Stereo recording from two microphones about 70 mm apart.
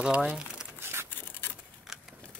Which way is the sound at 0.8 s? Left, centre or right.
Right.